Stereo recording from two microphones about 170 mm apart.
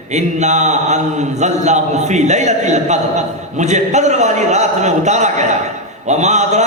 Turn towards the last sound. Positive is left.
turn(degrees=-40)  # may be behind; listen again after turning